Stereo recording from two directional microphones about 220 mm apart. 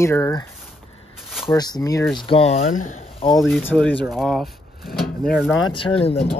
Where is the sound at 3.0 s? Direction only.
25° left (ahead or behind).